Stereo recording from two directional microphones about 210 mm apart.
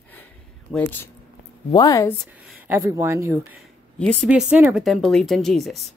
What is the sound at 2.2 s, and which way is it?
Speech, 5° right (ahead or behind).